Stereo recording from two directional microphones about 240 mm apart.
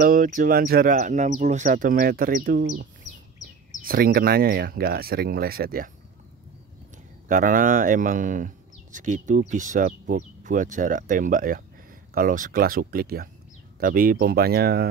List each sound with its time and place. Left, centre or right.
0.0 s speech: right
7.2 s speech: right